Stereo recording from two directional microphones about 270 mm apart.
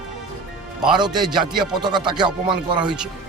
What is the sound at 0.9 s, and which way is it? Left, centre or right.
Speech, centre.